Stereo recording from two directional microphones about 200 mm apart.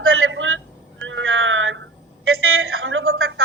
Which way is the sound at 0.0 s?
90° right.